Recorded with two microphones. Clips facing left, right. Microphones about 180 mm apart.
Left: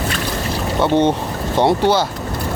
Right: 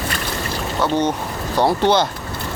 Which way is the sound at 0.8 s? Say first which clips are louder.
Left 4 dB; 25° left (ahead or behind).